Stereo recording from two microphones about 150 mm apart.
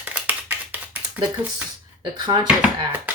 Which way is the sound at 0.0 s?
10° right (ahead or behind).